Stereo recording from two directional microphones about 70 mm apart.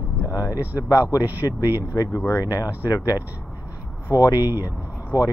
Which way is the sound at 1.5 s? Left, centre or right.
Left.